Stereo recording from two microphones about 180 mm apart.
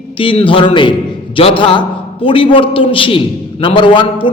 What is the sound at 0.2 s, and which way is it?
A man's voice, 30° left (ahead or behind).